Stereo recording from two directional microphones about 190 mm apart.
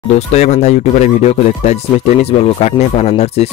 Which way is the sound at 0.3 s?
35° left (ahead or behind).